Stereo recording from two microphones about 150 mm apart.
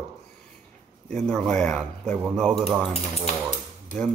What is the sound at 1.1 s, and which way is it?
Speech, 5° left (ahead or behind).